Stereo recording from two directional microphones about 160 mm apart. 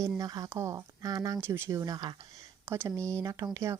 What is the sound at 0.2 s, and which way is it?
Speech, 25° right (ahead or behind).